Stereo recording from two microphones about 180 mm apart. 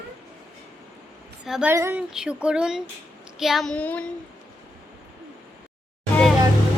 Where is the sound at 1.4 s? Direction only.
Centre (ahead or behind).